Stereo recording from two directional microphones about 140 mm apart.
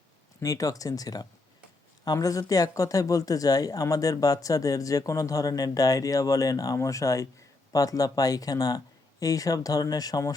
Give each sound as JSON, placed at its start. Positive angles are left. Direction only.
{"t": 0.3, "sound": "speech", "side_deg": 25}